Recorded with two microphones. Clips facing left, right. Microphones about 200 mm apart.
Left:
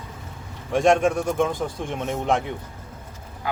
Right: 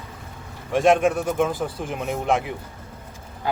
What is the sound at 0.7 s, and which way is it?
Speech, centre (ahead or behind).